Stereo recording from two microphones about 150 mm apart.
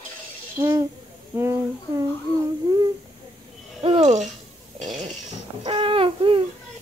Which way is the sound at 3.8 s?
45° right (ahead or behind).